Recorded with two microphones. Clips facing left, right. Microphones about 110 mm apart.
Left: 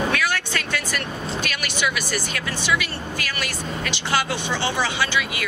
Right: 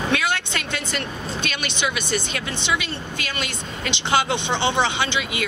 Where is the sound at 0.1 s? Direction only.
25° right (ahead or behind).